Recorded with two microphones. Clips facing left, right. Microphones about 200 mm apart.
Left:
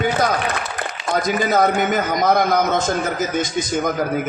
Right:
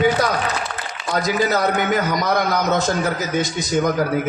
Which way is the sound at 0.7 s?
50° left (ahead or behind).